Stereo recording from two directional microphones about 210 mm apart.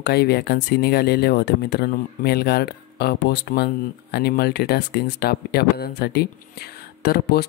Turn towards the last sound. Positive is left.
turn(degrees=50)  # may be behind; listen again after turning